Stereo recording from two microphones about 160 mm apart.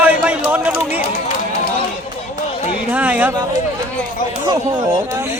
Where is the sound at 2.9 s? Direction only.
10° right (ahead or behind).